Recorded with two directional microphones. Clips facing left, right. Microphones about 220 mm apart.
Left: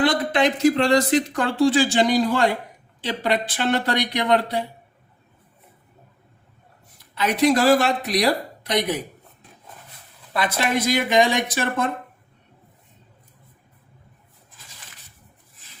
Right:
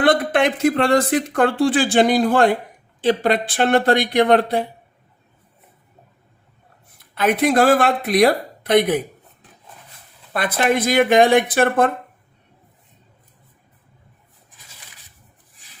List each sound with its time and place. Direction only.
0.0 s speech: 55° right (ahead or behind)
7.0 s speech: 55° right (ahead or behind)
10.3 s speech: 55° right (ahead or behind)